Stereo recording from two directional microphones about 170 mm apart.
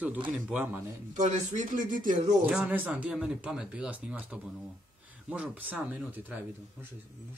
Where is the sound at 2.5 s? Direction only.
Centre (ahead or behind).